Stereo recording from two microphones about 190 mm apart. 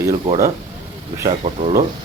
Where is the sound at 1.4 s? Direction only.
40° right (ahead or behind).